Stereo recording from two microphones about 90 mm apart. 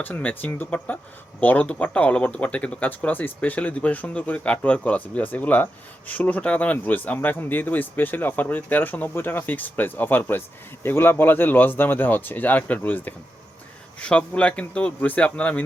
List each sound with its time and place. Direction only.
0.0 s speech: 20° left (ahead or behind)